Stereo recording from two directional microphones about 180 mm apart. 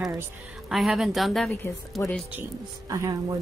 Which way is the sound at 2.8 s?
20° right (ahead or behind).